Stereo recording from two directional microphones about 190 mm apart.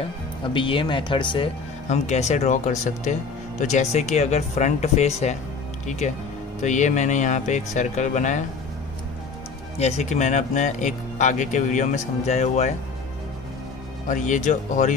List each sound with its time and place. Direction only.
0.4 s speech: 25° left (ahead or behind)
1.9 s speech: 35° left (ahead or behind)
9.8 s speech: 35° left (ahead or behind)
14.0 s speech: 40° left (ahead or behind)